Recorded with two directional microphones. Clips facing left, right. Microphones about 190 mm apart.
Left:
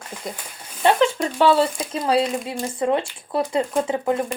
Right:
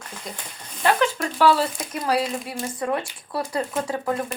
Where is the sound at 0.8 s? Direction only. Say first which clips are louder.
Left 3 dB; 25° left (ahead or behind).